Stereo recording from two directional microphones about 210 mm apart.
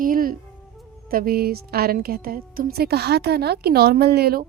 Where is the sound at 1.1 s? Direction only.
45° right (ahead or behind).